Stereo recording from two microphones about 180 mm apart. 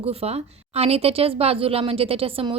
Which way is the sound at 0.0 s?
35° right (ahead or behind).